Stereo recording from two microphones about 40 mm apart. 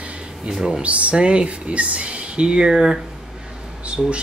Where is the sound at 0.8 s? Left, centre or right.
Right; by 3.0 s centre.